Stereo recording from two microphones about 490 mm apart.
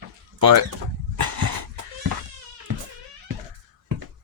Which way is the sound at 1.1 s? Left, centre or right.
Right.